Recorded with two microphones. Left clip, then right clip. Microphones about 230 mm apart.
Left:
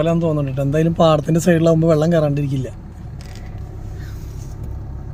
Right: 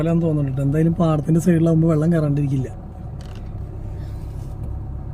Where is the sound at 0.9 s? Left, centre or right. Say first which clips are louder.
Left 7 dB; left.